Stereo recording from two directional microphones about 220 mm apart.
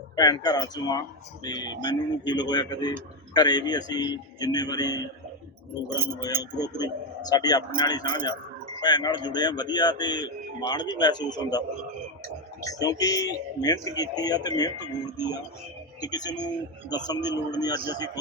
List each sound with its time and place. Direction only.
0.2 s a man's voice: 15° left (ahead or behind)
12.6 s speech: 15° left (ahead or behind)
16.0 s a man's voice: 20° left (ahead or behind)